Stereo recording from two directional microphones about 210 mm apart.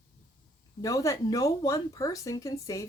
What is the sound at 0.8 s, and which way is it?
Speech, 15° left (ahead or behind).